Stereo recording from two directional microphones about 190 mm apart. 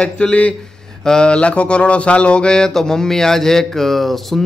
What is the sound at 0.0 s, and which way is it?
Speech, 5° left (ahead or behind).